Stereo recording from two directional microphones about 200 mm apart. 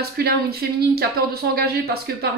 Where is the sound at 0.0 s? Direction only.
50° right (ahead or behind).